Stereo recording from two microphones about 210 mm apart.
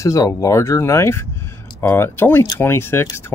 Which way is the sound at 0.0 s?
15° left (ahead or behind).